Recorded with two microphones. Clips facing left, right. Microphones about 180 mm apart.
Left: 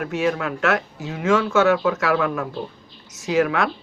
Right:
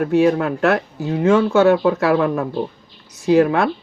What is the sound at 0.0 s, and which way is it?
Speech, 35° right (ahead or behind).